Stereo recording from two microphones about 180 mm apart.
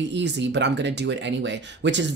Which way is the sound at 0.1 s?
75° right (ahead or behind).